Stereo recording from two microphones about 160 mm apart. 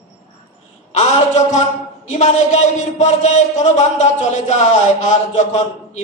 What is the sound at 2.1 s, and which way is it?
A man's voice, 45° left (ahead or behind).